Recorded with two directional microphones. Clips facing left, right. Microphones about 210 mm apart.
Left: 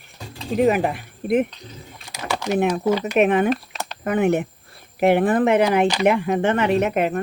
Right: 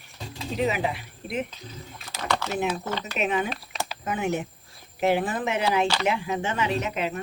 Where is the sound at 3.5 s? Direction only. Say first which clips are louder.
Left 10 dB; centre (ahead or behind).